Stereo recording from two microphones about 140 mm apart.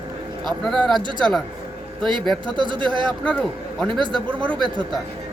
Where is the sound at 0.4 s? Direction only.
Centre (ahead or behind).